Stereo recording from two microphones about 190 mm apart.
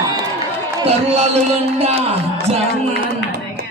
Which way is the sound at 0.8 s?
35° right (ahead or behind).